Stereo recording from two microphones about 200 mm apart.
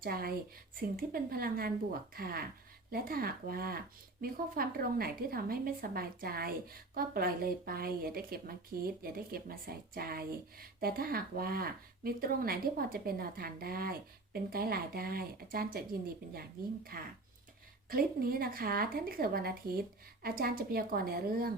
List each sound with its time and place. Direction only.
0.0 s speech: 50° right (ahead or behind)